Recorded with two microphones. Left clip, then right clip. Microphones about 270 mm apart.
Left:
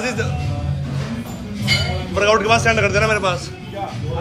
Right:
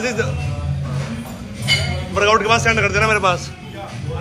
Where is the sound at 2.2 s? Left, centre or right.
Centre.